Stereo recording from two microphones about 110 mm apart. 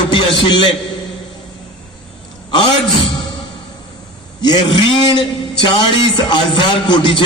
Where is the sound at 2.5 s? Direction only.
55° left (ahead or behind).